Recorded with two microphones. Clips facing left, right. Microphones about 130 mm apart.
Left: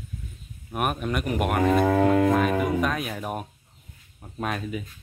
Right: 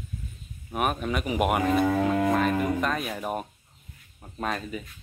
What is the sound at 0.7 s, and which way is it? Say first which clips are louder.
Speech: even; centre (ahead or behind).